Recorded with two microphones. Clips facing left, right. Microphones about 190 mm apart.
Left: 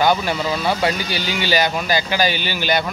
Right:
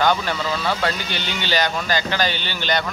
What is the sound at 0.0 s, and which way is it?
Speech, 10° left (ahead or behind).